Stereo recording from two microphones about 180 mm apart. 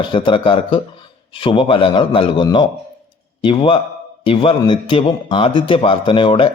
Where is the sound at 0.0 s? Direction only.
25° left (ahead or behind).